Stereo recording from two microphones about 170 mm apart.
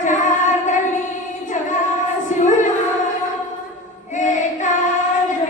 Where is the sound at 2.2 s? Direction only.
50° left (ahead or behind).